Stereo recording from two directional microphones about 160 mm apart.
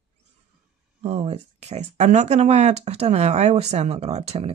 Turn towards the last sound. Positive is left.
turn(degrees=-40)  # may be behind; listen again after turning